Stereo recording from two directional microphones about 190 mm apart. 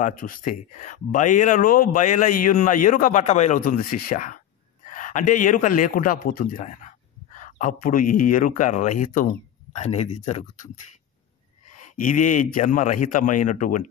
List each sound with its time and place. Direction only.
0.0 s a man's voice: 45° left (ahead or behind)
11.8 s speech: 40° left (ahead or behind)